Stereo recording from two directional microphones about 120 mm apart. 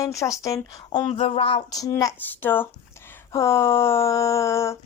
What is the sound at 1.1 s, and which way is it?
Speech, 55° left (ahead or behind).